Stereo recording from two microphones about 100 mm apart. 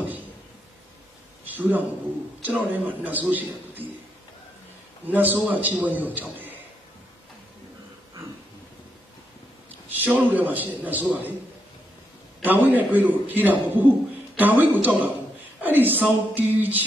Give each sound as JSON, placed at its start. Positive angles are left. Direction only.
{"t": 1.4, "sound": "a man's voice", "side_deg": -15}
{"t": 5.0, "sound": "a man's voice", "side_deg": -15}
{"t": 10.1, "sound": "a man's voice", "side_deg": -15}
{"t": 12.4, "sound": "a man's voice", "side_deg": -20}